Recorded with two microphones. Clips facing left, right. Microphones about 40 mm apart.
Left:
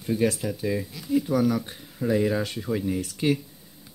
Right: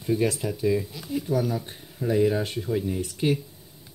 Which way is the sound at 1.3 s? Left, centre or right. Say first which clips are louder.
Even; left.